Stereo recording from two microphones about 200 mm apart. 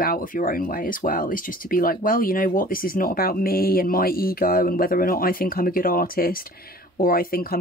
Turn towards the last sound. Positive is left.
turn(degrees=45)  # may be behind; listen again after turning